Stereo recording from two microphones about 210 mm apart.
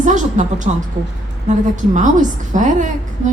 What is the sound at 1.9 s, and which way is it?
A woman's voice, 35° right (ahead or behind).